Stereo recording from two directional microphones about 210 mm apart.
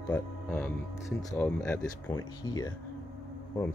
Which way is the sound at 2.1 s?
15° left (ahead or behind).